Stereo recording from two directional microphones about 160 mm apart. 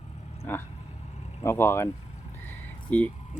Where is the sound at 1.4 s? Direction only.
15° left (ahead or behind).